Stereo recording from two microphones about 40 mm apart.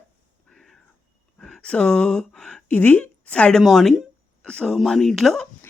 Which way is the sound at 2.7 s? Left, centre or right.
Left.